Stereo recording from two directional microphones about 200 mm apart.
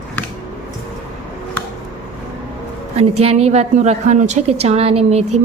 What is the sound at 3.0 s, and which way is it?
A woman's voice, 30° right (ahead or behind).